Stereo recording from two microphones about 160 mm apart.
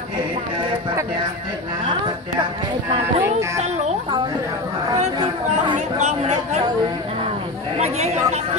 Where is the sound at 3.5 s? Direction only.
45° right (ahead or behind).